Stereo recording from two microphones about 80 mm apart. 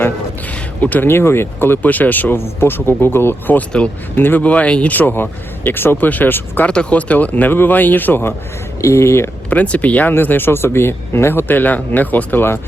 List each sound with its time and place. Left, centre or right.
0.8 s speech: left
6.7 s speech: centre
8.8 s speech: left
9.5 s speech: centre